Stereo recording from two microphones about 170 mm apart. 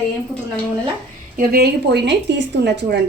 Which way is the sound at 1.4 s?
65° right (ahead or behind).